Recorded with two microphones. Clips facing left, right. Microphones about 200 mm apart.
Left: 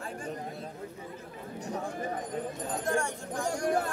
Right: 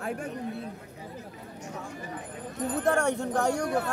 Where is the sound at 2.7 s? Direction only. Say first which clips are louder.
Right 6 dB; 65° right (ahead or behind).